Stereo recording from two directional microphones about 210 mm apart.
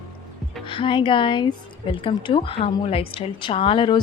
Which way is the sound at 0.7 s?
25° left (ahead or behind).